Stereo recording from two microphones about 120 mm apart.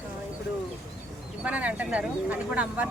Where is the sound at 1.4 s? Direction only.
10° right (ahead or behind).